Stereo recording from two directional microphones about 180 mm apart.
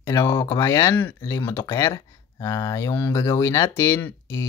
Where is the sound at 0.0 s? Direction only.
15° left (ahead or behind).